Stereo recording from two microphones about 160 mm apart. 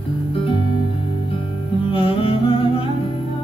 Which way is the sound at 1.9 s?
35° left (ahead or behind).